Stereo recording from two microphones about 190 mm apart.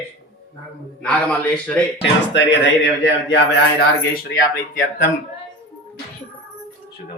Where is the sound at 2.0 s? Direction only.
70° left (ahead or behind).